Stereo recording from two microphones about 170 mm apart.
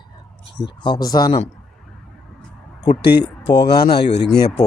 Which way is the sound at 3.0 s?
70° left (ahead or behind).